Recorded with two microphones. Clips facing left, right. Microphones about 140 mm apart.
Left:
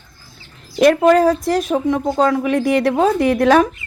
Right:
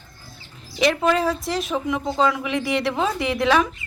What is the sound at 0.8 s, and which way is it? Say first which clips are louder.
Speech: left 8 dB; 50° left (ahead or behind).